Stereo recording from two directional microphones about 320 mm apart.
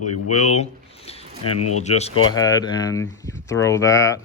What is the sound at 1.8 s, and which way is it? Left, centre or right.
Speech, left.